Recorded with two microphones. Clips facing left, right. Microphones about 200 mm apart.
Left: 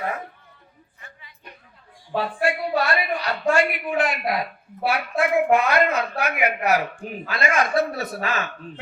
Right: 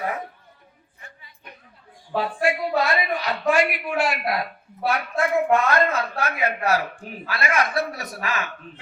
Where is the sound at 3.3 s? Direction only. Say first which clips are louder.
Even; 15° right (ahead or behind).